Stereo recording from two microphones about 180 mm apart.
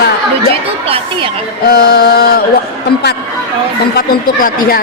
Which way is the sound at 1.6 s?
55° left (ahead or behind).